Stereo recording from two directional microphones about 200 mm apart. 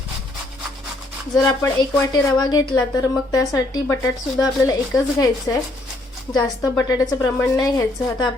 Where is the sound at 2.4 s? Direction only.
20° left (ahead or behind).